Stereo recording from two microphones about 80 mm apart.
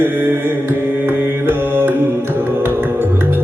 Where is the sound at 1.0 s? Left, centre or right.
Right.